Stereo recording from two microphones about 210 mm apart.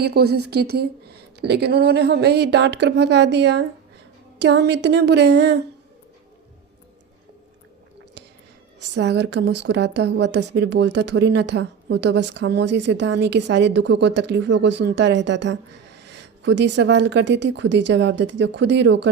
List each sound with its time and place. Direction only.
0.0 s a woman's voice: 50° right (ahead or behind)
8.8 s a woman's voice: 55° right (ahead or behind)